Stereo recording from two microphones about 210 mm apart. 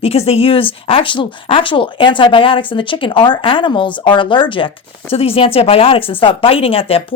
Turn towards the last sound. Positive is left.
turn(degrees=25)  # may be behind; listen again after turning